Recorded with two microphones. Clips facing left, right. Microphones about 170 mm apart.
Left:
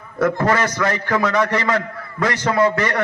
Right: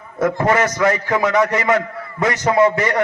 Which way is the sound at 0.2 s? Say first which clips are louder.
Right 1 dB; 25° right (ahead or behind).